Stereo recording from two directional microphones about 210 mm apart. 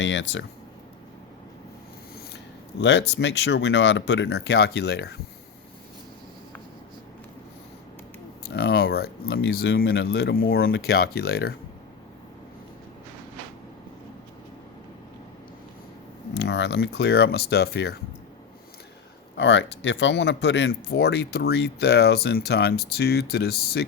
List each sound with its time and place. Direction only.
0.0 s speech: 60° left (ahead or behind)
3.1 s speech: 55° left (ahead or behind)
8.4 s speech: 50° left (ahead or behind)
16.3 s speech: 55° left (ahead or behind)
19.4 s speech: 60° left (ahead or behind)